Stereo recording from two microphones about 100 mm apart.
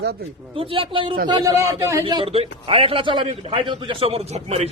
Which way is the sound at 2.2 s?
80° right.